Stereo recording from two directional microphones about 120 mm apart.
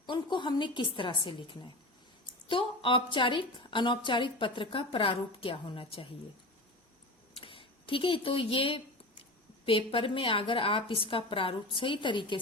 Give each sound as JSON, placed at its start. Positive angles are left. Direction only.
{"t": 0.0, "sound": "a woman's voice", "side_deg": 40}
{"t": 7.3, "sound": "a sound", "side_deg": 45}
{"t": 9.6, "sound": "a woman's voice", "side_deg": 50}